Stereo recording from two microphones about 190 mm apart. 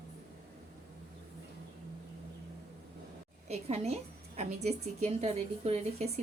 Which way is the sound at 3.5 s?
35° right (ahead or behind).